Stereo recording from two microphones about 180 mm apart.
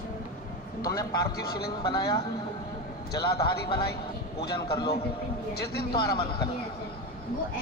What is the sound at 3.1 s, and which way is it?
Speech, 60° left (ahead or behind).